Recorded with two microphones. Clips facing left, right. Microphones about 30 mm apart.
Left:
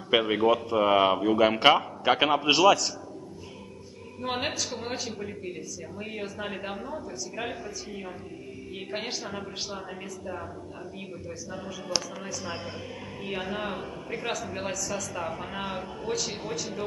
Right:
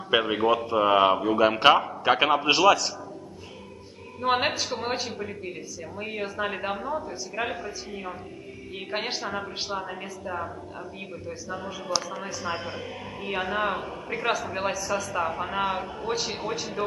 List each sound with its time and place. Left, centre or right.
0.2 s a man's voice: centre
4.2 s a man's voice: right
15.1 s a man's voice: right